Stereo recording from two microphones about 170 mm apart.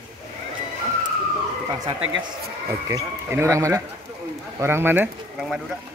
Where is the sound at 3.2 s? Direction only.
15° right (ahead or behind).